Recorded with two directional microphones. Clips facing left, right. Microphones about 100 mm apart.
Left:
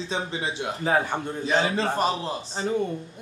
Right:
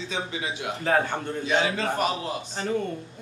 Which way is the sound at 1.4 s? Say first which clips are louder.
Left 1 dB; 35° left (ahead or behind).